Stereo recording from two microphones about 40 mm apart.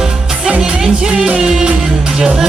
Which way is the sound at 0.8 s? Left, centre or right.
Right.